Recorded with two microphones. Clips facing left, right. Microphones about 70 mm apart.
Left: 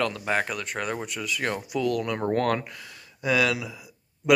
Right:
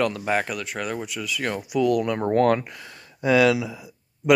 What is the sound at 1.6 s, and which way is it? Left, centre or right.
Speech, centre.